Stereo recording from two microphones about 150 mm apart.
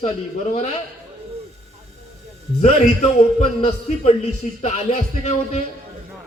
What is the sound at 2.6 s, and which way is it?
A man's voice, 50° left (ahead or behind).